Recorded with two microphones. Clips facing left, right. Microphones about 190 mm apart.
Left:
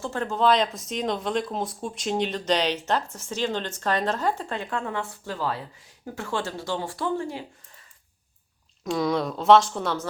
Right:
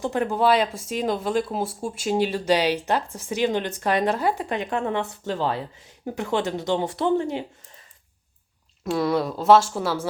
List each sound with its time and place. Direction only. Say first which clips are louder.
0.0 s speech: right 2 dB; 15° right (ahead or behind)
8.8 s speech: right 2 dB; 5° right (ahead or behind)